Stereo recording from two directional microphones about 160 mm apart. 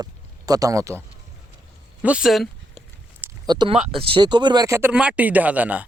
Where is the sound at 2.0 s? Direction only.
5° right (ahead or behind).